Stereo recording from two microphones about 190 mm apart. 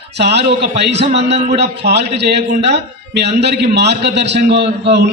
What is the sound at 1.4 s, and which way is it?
A man's voice, 60° right (ahead or behind).